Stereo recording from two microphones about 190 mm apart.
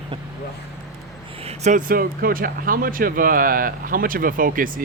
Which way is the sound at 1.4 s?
35° right (ahead or behind).